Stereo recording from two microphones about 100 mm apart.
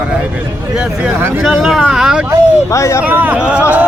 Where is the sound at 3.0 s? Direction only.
15° right (ahead or behind).